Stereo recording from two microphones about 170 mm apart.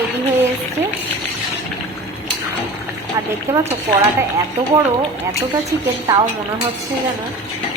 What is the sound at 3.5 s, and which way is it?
Speech, 15° right (ahead or behind).